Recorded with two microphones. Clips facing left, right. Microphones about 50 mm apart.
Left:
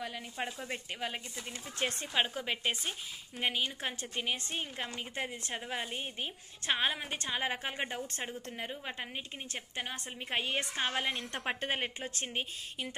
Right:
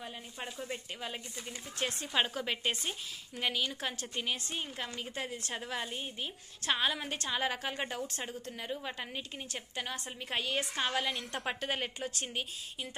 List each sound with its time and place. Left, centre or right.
0.4 s a woman's voice: left
2.1 s speech: centre
3.3 s a woman's voice: left
4.5 s a woman's voice: left
7.0 s a woman's voice: centre
8.5 s a woman's voice: left